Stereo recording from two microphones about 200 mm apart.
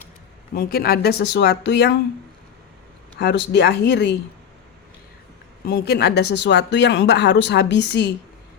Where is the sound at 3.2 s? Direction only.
60° left (ahead or behind).